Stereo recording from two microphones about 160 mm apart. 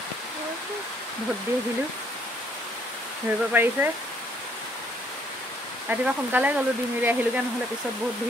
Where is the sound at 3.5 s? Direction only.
15° right (ahead or behind).